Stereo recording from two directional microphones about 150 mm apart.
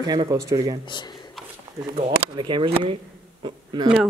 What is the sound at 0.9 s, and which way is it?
Speech, 30° left (ahead or behind).